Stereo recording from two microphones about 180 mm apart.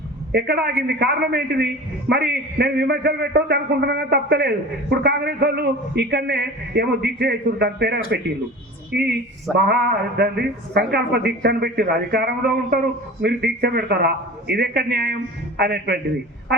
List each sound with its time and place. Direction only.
0.3 s a man's voice: 65° right (ahead or behind)